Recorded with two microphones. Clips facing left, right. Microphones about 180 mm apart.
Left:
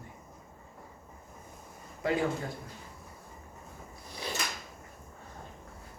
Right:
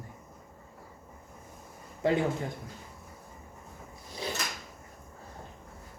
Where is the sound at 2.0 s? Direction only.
25° right (ahead or behind).